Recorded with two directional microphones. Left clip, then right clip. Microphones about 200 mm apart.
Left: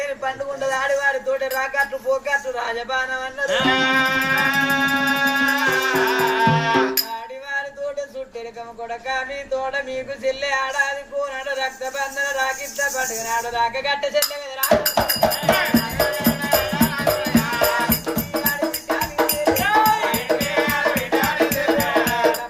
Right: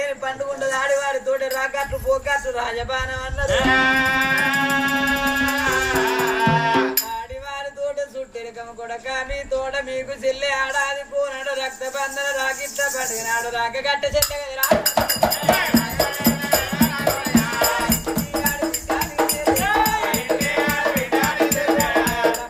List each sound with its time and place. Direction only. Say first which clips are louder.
0.0 s a man's voice: even; 15° right (ahead or behind)
3.5 s music: right 1 dB; centre (ahead or behind)
10.2 s speech: even; 15° right (ahead or behind)
14.8 s music: even; centre (ahead or behind)
18.9 s music: even; centre (ahead or behind)